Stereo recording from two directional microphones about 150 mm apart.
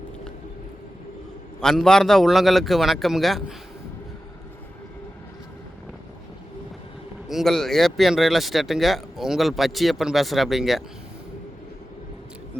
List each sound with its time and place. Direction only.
1.6 s speech: 5° left (ahead or behind)
7.3 s speech: centre (ahead or behind)